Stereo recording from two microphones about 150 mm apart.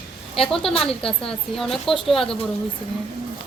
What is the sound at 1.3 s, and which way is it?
A woman's voice, centre (ahead or behind).